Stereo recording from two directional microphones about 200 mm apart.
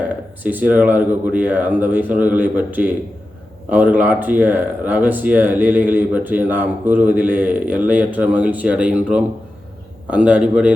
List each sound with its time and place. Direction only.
0.4 s speech: 10° right (ahead or behind)